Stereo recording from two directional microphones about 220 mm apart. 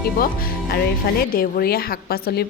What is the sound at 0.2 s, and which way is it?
Speech, 45° left (ahead or behind).